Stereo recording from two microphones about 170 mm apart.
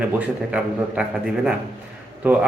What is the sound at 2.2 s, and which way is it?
Speech, 10° right (ahead or behind).